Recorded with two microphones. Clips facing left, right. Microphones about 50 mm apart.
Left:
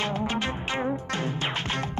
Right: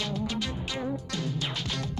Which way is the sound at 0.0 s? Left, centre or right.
Left.